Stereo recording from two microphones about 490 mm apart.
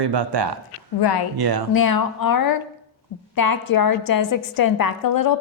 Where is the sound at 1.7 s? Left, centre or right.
Left.